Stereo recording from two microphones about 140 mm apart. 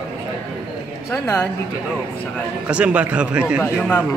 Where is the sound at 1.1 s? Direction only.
15° left (ahead or behind).